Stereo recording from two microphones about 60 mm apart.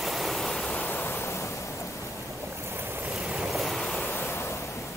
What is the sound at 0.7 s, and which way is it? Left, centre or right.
Waves, left.